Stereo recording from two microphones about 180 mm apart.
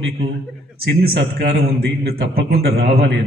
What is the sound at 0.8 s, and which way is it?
A man's voice, 55° right (ahead or behind).